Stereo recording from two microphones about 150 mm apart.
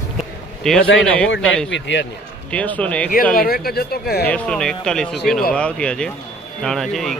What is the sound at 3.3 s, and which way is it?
Speech, 80° left.